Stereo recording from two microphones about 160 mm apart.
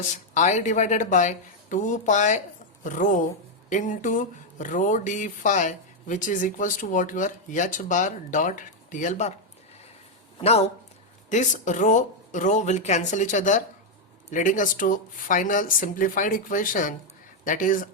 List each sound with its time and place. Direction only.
0.1 s speech: 50° left (ahead or behind)
10.4 s speech: 40° left (ahead or behind); by 17.8 s 55° left (ahead or behind)